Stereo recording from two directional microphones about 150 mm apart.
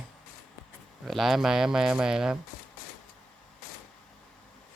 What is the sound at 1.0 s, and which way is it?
Speech, centre (ahead or behind).